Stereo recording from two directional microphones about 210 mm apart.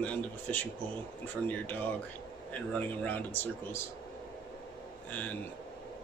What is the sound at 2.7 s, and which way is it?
Speech, 10° left (ahead or behind).